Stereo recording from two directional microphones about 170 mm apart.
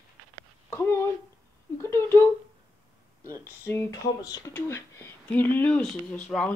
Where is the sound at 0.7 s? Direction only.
15° left (ahead or behind).